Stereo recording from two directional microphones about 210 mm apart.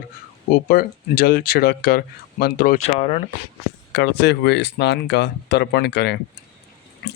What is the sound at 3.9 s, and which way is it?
Speech, 55° left (ahead or behind).